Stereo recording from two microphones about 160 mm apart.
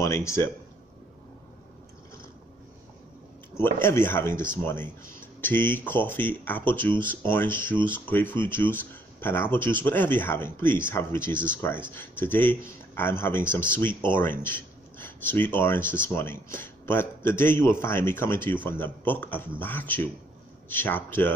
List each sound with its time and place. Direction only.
0.0 s speech: 15° left (ahead or behind)
3.5 s speech: 15° left (ahead or behind)
5.4 s speech: 10° left (ahead or behind)